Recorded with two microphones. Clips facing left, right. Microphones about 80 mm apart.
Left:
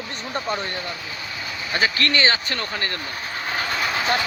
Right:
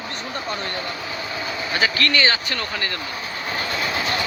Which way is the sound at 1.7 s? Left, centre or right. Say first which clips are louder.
Even; left.